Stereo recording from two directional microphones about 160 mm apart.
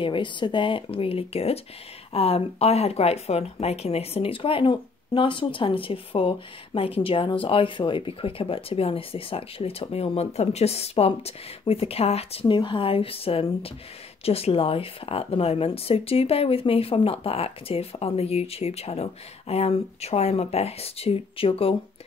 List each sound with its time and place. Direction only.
0.0 s speech: 30° left (ahead or behind)